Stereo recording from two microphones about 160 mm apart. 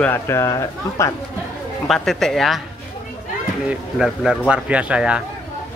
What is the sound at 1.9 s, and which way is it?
Speech, centre (ahead or behind).